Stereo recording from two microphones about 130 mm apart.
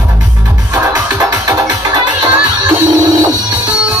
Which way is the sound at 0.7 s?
30° right (ahead or behind).